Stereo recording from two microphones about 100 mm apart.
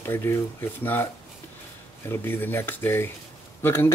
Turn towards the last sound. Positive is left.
turn(degrees=25)  # may be behind; listen again after turning